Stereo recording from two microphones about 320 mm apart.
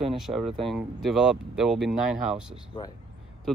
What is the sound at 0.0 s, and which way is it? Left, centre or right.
Speech, centre.